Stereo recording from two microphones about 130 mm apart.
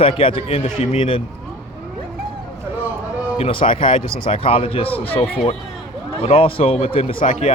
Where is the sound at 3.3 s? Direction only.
45° left (ahead or behind).